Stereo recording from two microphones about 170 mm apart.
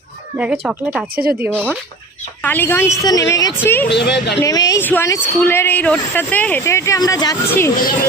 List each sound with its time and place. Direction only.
0.3 s speech: 10° right (ahead or behind)
2.4 s a woman's voice: 10° left (ahead or behind)
3.8 s speech: 90° left
4.4 s a woman's voice: 20° left (ahead or behind)